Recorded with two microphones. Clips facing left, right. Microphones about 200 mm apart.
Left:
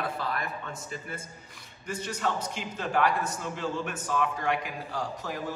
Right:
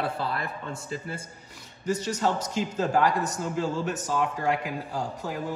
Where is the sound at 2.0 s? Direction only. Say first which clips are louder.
Right 4 dB; 30° right (ahead or behind).